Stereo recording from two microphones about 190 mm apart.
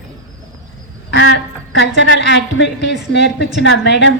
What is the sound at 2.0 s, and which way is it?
A woman's voice, 75° left (ahead or behind).